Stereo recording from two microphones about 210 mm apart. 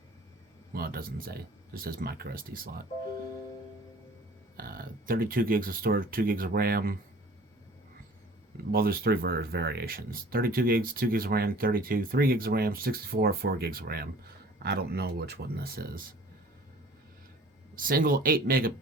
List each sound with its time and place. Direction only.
0.7 s speech: 45° right (ahead or behind)
4.5 s speech: 45° right (ahead or behind)
8.7 s speech: 45° right (ahead or behind)
17.7 s speech: 45° right (ahead or behind)